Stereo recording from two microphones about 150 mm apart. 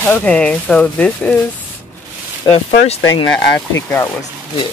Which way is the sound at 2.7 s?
55° left (ahead or behind).